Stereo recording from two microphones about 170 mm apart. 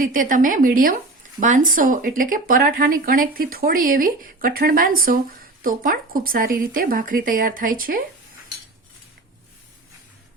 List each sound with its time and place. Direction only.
0.0 s speech: 50° right (ahead or behind)